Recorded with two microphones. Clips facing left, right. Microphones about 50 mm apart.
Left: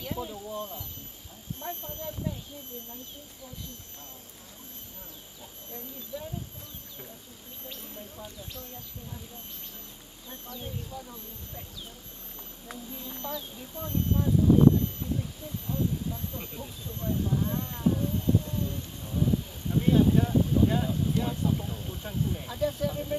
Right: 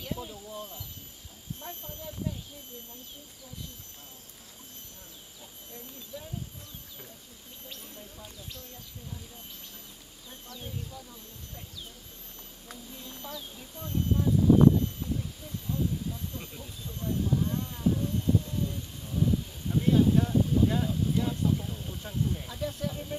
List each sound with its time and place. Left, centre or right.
0.0 s speech: centre
6.1 s speech: centre
7.6 s speech: centre
10.5 s speech: centre
12.6 s speech: centre